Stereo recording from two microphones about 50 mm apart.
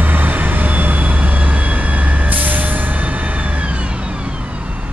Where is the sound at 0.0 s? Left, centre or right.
Right.